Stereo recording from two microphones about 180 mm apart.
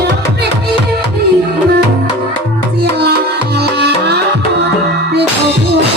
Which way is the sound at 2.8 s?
65° right (ahead or behind).